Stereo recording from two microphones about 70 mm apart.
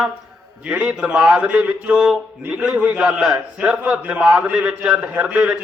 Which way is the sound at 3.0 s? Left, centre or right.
Centre.